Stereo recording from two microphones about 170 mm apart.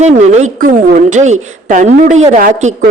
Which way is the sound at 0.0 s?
40° right (ahead or behind).